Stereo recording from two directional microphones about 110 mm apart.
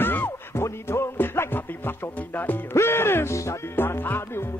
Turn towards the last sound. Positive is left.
turn(degrees=20)  # may be behind; listen again after turning